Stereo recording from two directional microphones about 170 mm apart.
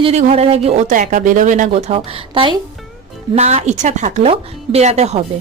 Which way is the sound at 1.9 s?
30° right (ahead or behind).